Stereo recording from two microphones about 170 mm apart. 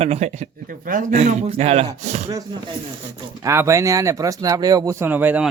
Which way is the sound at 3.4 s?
15° right (ahead or behind).